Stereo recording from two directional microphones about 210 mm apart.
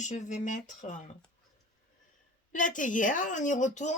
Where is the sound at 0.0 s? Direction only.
35° left (ahead or behind).